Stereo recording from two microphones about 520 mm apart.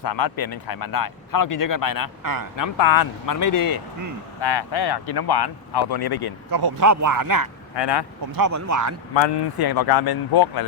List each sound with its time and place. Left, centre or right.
0.0 s speech: left
2.2 s speech: right
2.6 s speech: left
6.5 s speech: right
7.8 s speech: left
8.3 s speech: right
9.2 s speech: left